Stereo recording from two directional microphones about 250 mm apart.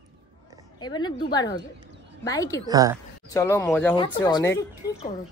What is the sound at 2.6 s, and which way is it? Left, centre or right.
Speech, centre.